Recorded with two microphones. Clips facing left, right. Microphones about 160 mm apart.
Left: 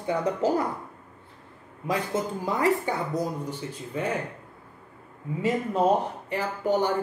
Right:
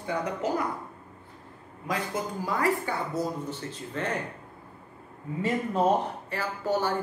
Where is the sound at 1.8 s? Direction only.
25° left (ahead or behind).